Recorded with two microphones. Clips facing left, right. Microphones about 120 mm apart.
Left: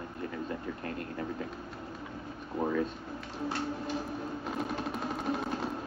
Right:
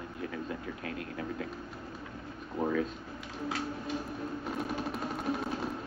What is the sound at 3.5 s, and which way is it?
Music, centre (ahead or behind).